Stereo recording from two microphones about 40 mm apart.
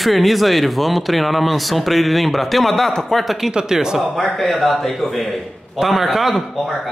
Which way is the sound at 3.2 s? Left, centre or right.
Centre.